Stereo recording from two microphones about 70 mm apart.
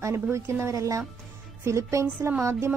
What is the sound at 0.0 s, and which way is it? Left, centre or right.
Speech, right.